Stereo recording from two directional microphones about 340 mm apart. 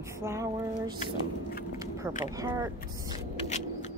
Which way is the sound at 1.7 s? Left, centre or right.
Centre.